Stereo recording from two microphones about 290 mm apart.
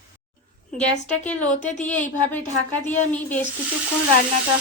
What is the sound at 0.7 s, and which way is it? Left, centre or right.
Speech, centre.